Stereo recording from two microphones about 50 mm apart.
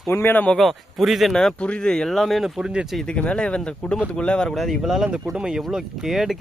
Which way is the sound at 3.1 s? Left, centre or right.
Left.